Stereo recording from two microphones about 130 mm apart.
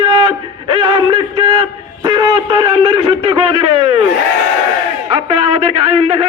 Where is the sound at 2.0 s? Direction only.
35° right (ahead or behind).